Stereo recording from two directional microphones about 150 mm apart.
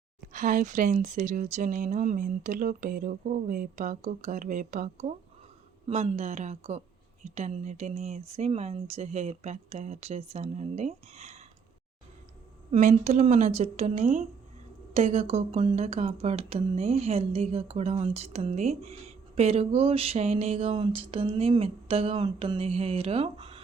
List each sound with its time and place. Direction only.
0.3 s speech: 60° right (ahead or behind)
12.7 s speech: 50° right (ahead or behind)